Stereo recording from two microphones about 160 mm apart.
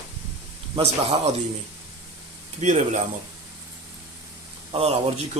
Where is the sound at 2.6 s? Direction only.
50° right (ahead or behind).